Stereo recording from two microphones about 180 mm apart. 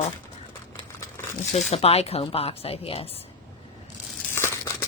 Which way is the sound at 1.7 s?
35° left (ahead or behind).